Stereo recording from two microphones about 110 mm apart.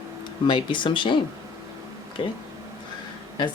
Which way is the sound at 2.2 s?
55° left (ahead or behind).